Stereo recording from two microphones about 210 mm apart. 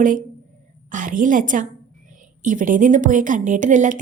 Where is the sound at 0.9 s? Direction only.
40° right (ahead or behind).